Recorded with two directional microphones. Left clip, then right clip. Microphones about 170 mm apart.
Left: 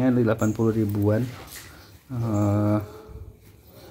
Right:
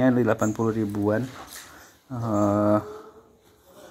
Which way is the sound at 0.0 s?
10° right (ahead or behind).